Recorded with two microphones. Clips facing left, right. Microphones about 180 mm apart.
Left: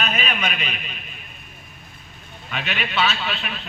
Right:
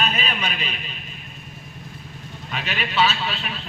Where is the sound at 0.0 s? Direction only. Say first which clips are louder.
Even; 35° right (ahead or behind).